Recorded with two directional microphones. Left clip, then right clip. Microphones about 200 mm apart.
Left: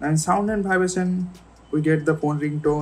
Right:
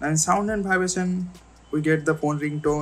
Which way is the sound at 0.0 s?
10° right (ahead or behind).